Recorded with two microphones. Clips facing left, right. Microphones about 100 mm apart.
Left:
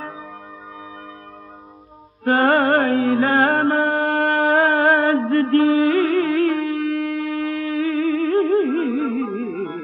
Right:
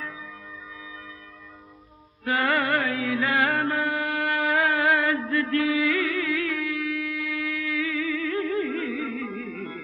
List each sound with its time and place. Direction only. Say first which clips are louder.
2.2 s music: left 8 dB; 45° left (ahead or behind)